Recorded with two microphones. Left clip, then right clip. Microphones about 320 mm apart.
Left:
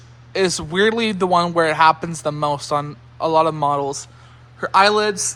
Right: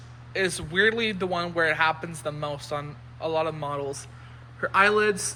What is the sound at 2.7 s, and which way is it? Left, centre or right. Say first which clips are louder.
Speech: left 10 dB; left.